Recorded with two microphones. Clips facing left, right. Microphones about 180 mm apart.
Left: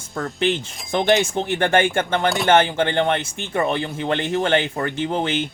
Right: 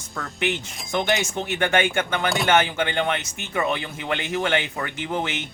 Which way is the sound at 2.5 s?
30° left (ahead or behind).